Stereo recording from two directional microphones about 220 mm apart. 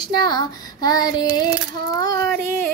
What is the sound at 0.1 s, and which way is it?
Child singing, 20° left (ahead or behind).